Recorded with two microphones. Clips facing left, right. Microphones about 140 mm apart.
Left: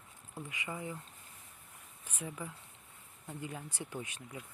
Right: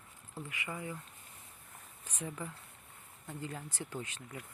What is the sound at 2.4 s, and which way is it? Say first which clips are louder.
Speech: right 1 dB; 10° left (ahead or behind).